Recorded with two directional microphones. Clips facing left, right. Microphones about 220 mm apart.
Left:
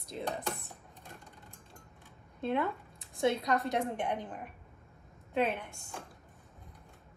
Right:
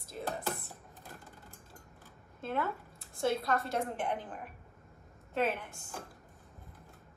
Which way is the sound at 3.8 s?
5° right (ahead or behind).